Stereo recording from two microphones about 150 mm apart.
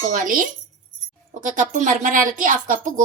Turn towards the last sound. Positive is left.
turn(degrees=-65)  # may be behind; listen again after turning